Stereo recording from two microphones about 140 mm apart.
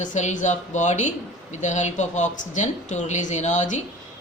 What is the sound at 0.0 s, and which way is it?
Speech, 60° left (ahead or behind).